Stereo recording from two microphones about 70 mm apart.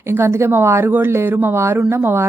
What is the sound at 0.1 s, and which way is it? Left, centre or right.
Speech, right.